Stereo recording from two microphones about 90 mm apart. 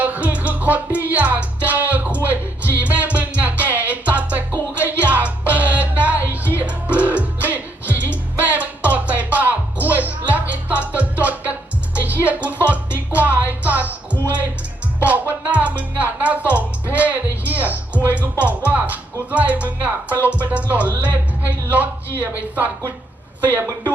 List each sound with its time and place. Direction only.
0.0 s music: 15° right (ahead or behind)